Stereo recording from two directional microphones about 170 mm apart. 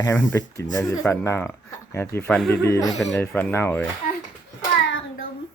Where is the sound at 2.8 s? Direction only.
Centre (ahead or behind).